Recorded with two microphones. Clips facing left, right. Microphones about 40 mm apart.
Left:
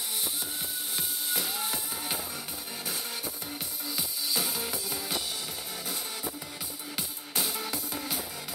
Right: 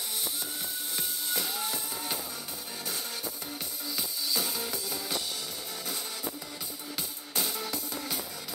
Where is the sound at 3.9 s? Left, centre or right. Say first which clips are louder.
Even; centre.